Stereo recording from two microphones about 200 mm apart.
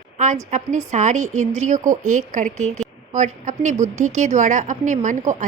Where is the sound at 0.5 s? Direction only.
35° right (ahead or behind).